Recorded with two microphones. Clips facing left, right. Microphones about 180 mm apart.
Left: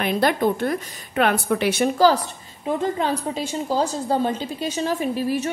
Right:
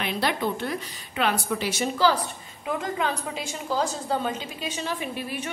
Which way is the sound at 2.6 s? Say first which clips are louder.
Left 5 dB; 30° left (ahead or behind).